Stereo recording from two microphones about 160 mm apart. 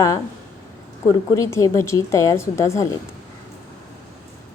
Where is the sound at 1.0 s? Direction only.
20° left (ahead or behind).